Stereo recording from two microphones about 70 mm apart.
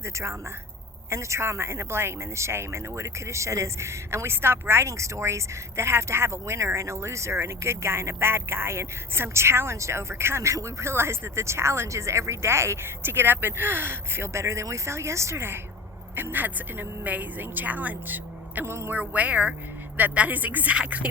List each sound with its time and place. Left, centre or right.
0.0 s a woman's voice: right
18.6 s speech: right
18.9 s a woman's voice: right